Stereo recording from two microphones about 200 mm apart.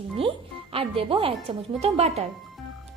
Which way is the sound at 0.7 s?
30° right (ahead or behind).